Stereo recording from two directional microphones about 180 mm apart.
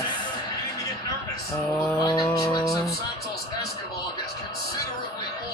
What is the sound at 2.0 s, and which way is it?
Music, 20° left (ahead or behind).